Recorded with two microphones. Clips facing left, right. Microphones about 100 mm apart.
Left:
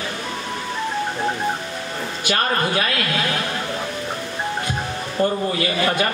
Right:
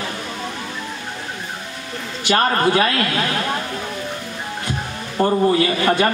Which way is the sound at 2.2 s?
35° right (ahead or behind).